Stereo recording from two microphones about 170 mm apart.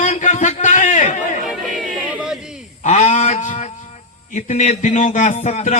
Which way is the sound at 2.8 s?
40° left (ahead or behind).